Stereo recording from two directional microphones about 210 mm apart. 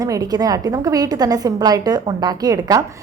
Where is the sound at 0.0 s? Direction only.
15° right (ahead or behind).